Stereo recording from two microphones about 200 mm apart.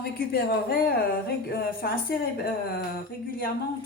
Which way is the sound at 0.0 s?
50° left (ahead or behind).